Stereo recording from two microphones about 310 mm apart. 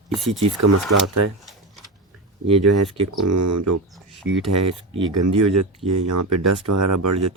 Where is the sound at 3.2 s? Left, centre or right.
Right.